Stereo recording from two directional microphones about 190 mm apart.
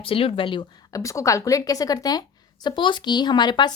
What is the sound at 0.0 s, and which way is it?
A woman's voice, 30° left (ahead or behind).